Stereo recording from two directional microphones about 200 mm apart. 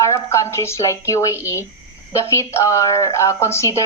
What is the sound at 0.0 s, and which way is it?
A woman's voice, 15° left (ahead or behind).